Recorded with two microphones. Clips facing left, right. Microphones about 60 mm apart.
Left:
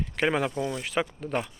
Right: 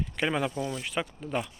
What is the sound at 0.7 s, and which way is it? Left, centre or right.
Speech, left.